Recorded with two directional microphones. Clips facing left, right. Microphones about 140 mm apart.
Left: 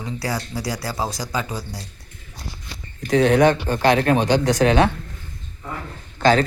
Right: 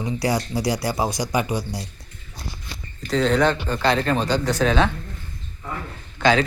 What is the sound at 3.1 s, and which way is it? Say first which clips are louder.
Speech: left 4 dB; 60° left (ahead or behind).